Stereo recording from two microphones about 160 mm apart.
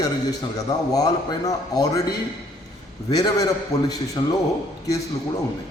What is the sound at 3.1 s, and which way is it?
A man's voice, 25° left (ahead or behind).